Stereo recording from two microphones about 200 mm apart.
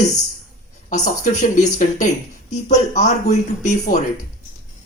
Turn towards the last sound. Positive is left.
turn(degrees=35)  # may be behind; listen again after turning